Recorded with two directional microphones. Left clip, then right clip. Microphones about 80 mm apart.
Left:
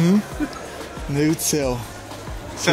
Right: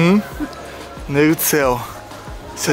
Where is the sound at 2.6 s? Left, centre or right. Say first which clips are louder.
Even; right.